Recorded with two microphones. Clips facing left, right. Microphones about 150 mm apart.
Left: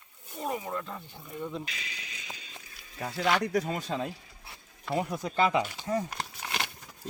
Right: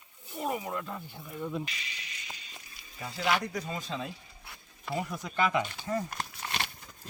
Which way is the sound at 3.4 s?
70° left (ahead or behind).